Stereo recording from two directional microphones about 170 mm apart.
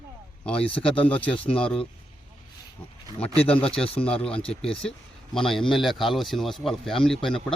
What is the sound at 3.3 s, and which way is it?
Speech, 35° left (ahead or behind).